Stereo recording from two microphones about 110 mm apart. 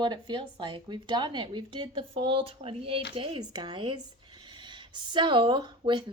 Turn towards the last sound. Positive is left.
turn(degrees=-45)  # may be behind; listen again after turning